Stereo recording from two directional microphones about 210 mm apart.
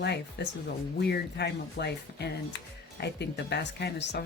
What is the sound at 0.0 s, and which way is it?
Speech, 50° left (ahead or behind).